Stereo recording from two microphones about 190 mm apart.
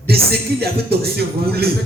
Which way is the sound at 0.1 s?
55° right (ahead or behind).